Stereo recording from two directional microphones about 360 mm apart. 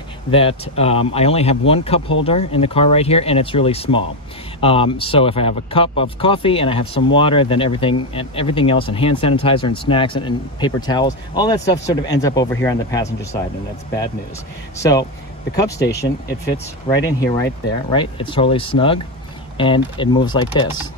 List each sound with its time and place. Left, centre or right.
0.3 s speech: centre
14.8 s speech: centre
15.8 s speech: left
16.8 s speech: centre